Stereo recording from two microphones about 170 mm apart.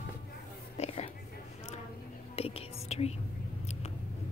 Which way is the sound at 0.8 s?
40° left (ahead or behind).